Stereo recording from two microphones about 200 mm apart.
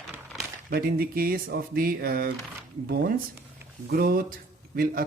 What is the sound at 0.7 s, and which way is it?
Speech, 50° right (ahead or behind).